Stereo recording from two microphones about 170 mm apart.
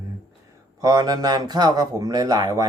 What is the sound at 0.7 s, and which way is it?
Speech, 20° right (ahead or behind).